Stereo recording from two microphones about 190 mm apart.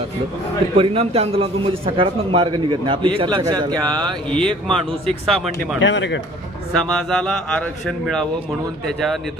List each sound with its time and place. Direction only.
0.8 s a man's voice: 30° right (ahead or behind)
4.3 s speech: 5° left (ahead or behind)
5.8 s speech: 75° left (ahead or behind)
6.7 s speech: 5° left (ahead or behind)